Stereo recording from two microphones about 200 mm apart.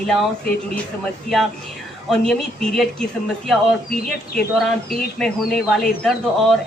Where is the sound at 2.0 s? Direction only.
Centre (ahead or behind).